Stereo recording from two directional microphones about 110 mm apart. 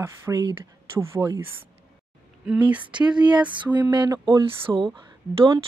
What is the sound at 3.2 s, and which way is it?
Speech, 40° right (ahead or behind).